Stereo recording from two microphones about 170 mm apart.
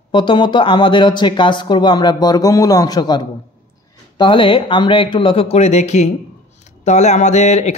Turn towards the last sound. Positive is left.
turn(degrees=45)  # may be behind; listen again after turning